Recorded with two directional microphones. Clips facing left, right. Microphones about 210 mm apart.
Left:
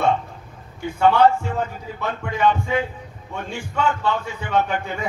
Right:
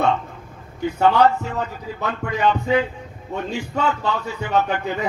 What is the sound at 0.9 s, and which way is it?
A man's voice, 40° right (ahead or behind).